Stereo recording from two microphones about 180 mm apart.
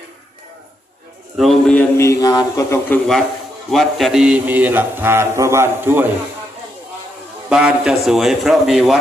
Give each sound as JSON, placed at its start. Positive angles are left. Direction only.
{"t": 1.4, "sound": "a man's voice", "side_deg": 5}
{"t": 2.0, "sound": "speech", "side_deg": 20}
{"t": 3.7, "sound": "speech", "side_deg": 0}
{"t": 7.5, "sound": "a man's voice", "side_deg": -5}